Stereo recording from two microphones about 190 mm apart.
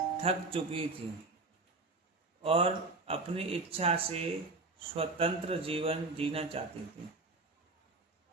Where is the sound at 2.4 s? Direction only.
30° right (ahead or behind).